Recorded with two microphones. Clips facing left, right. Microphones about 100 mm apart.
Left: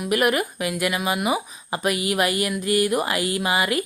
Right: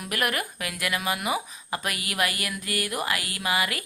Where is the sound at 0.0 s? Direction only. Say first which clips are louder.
Left 8 dB; 20° left (ahead or behind).